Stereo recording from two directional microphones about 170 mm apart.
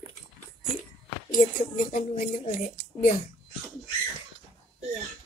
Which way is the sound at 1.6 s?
50° left (ahead or behind).